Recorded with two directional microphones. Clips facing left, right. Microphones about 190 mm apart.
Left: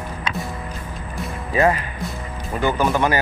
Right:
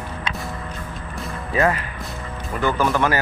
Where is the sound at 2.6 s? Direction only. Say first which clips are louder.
Left 1 dB; 20° left (ahead or behind).